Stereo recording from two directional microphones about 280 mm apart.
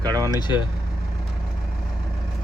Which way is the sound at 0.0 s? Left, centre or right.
Centre.